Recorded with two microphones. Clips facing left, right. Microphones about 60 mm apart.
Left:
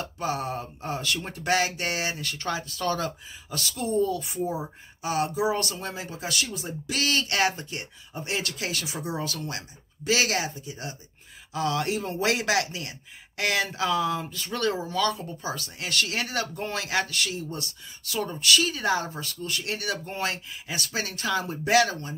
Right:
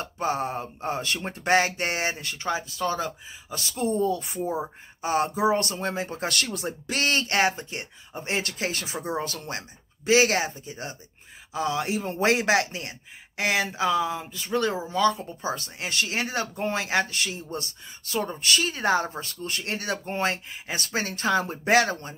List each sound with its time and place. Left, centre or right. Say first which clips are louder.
0.0 s speech: right 2 dB; right
2.3 s speech: right 2 dB; centre; by 6.7 s right
6.9 s speech: right 1 dB; right
11.6 s speech: even; centre
12.1 s speech: right 5 dB; right
13.4 s speech: right 1 dB; centre; by 22.1 s right